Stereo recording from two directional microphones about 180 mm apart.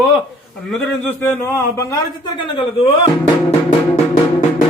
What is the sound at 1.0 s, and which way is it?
Speech, 10° left (ahead or behind).